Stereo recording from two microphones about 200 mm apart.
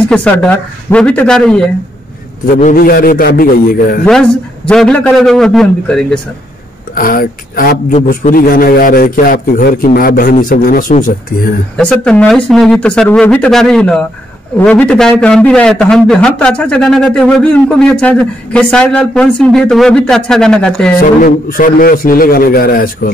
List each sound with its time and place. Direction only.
0.1 s a man's voice: 5° left (ahead or behind)
2.4 s a man's voice: 45° left (ahead or behind)
4.0 s a man's voice: 5° left (ahead or behind)
7.0 s a man's voice: 45° left (ahead or behind)
11.7 s a man's voice: 5° left (ahead or behind)
21.2 s a man's voice: 45° left (ahead or behind)